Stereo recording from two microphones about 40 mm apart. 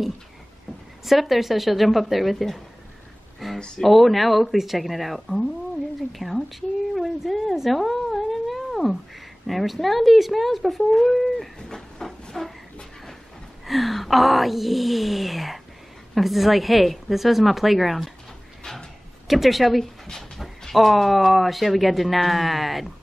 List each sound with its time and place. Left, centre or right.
1.0 s speech: centre
3.5 s speech: left
3.8 s speech: centre
7.7 s cat: centre
9.5 s speech: centre
11.7 s train: centre
13.7 s speech: centre
18.6 s a sound: centre
19.2 s speech: centre